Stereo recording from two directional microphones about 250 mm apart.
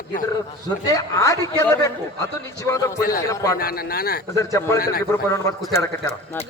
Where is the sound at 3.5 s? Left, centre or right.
Left.